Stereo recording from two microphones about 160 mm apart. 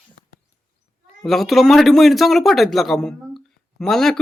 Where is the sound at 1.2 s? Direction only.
Centre (ahead or behind).